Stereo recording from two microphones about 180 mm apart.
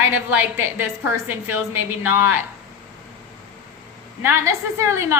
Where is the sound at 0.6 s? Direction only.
15° right (ahead or behind).